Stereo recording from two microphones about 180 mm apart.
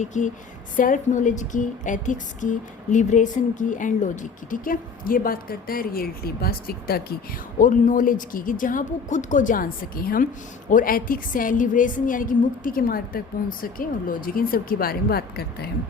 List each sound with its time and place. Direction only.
0.0 s speech: 45° left (ahead or behind); by 7.2 s 60° left (ahead or behind)
7.6 s speech: 45° left (ahead or behind)